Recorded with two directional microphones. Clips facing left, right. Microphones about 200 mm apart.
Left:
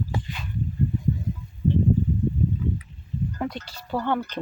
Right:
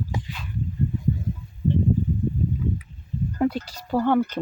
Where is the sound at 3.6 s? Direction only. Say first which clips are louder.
Right 6 dB; 40° right (ahead or behind).